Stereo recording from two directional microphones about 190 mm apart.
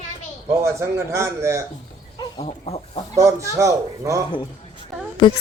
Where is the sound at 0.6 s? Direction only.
15° right (ahead or behind).